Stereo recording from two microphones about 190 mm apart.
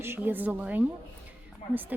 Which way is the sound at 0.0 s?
10° right (ahead or behind).